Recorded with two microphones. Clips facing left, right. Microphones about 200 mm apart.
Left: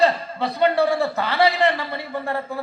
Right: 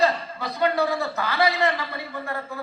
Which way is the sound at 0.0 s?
30° left (ahead or behind).